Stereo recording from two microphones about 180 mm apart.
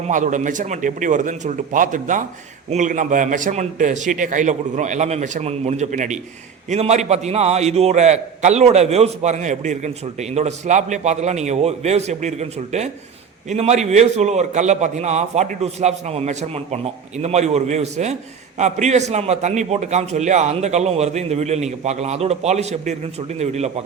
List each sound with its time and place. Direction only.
0.1 s a man's voice: 45° right (ahead or behind)